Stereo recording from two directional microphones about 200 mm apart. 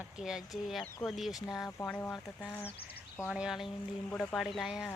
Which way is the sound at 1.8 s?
10° left (ahead or behind).